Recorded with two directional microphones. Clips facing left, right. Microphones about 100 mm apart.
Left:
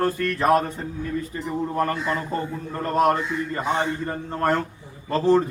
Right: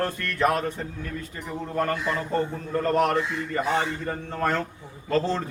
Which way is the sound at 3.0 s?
20° left (ahead or behind).